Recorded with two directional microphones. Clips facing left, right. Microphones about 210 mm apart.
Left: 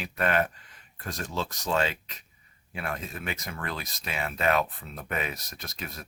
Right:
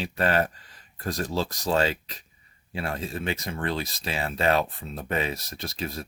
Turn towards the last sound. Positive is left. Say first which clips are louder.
# right 7 dB
turn(degrees=-30)  # may be behind; listen again after turning